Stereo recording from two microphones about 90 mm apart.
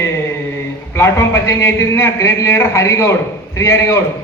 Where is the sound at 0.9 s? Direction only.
30° left (ahead or behind).